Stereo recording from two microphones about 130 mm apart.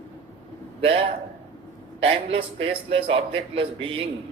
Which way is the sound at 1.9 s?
45° right (ahead or behind).